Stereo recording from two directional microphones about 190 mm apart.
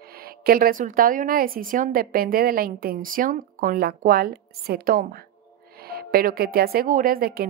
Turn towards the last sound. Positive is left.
turn(degrees=-50)  # may be behind; listen again after turning